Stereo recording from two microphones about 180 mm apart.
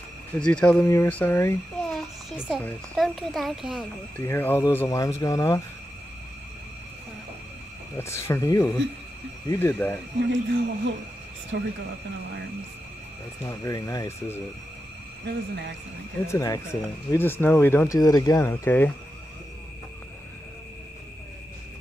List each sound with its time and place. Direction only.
0.4 s speech: 5° left (ahead or behind)
1.9 s a sound: centre (ahead or behind)
2.6 s speech: centre (ahead or behind)
4.2 s speech: 10° left (ahead or behind)
8.0 s speech: 15° left (ahead or behind)
10.2 s speech: 90° right
11.5 s speech: 75° right (ahead or behind)
13.5 s speech: 20° left (ahead or behind)
15.2 s speech: 70° right (ahead or behind)
16.3 s speech: 15° left (ahead or behind)